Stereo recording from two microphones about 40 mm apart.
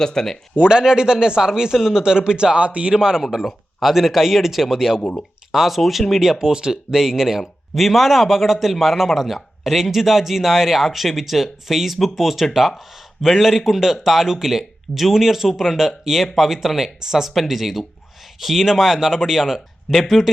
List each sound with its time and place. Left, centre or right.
0.0 s speech: centre
0.5 s a man's voice: right
2.9 s a man's voice: centre
3.3 s speech: centre
6.4 s a man's voice: centre